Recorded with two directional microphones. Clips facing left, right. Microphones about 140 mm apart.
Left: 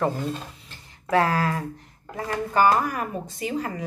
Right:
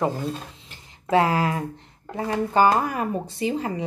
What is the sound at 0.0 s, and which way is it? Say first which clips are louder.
A woman's voice: even; 15° right (ahead or behind).